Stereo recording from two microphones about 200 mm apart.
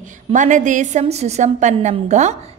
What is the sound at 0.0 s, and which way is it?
A woman's voice, 40° right (ahead or behind).